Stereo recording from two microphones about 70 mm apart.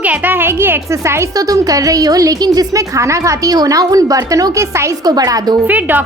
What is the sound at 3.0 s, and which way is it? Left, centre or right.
A woman's voice, right.